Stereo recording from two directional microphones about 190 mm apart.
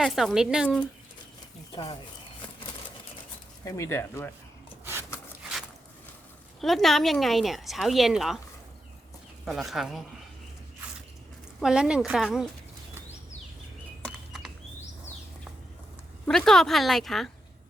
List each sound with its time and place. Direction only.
0.0 s speech: centre (ahead or behind)
1.7 s speech: 20° left (ahead or behind)
3.6 s speech: 15° left (ahead or behind)
6.6 s speech: centre (ahead or behind)
9.5 s speech: centre (ahead or behind)
11.6 s speech: 5° right (ahead or behind)
14.0 s a sound: centre (ahead or behind)
16.2 s speech: 5° left (ahead or behind)